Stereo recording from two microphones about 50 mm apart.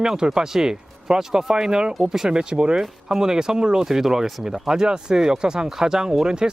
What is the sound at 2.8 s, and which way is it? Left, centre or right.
Speech, centre.